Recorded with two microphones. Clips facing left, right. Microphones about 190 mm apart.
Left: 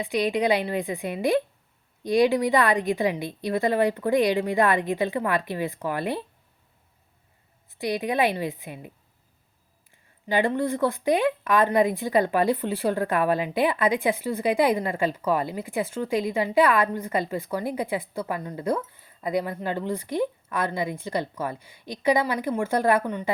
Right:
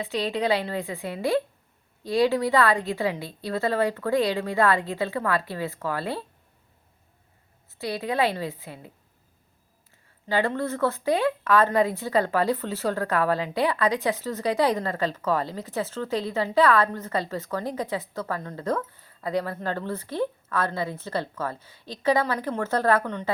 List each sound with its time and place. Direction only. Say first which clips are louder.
0.0 s speech: left 3 dB; 15° left (ahead or behind)
7.7 s speech: left 2 dB; 15° left (ahead or behind)
10.2 s speech: left 2 dB; 15° left (ahead or behind)